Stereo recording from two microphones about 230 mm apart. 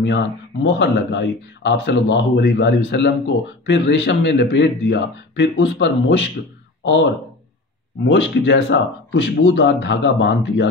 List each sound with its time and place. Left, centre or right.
0.7 s speech: left
8.1 s speech: left